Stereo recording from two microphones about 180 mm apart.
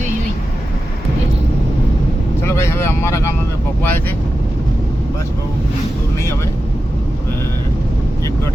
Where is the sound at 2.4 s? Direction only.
15° left (ahead or behind).